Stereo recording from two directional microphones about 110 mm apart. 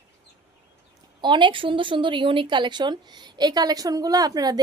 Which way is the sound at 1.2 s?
45° right (ahead or behind).